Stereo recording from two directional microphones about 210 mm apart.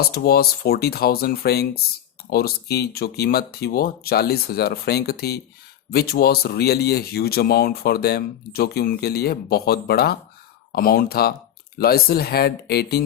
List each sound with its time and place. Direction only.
0.1 s speech: 45° left (ahead or behind)